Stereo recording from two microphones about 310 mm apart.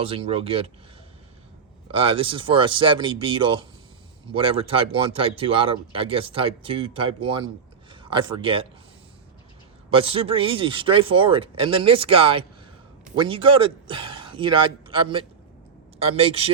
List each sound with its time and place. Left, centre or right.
0.0 s speech: centre
1.9 s speech: centre
9.9 s a man's voice: centre